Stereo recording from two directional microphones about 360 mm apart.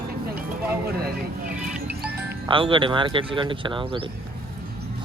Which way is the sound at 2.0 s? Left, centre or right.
Centre.